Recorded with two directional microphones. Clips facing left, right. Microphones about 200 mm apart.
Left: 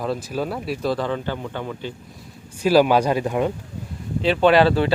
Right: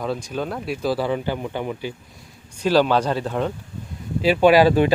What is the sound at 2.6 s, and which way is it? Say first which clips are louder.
Speech: left 2 dB; 10° left (ahead or behind).